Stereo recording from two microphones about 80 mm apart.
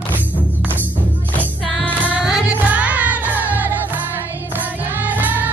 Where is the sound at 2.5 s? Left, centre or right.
Centre.